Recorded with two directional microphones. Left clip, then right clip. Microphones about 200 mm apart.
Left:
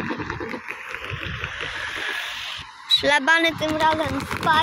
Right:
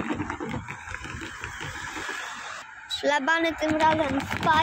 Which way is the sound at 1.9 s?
55° right (ahead or behind).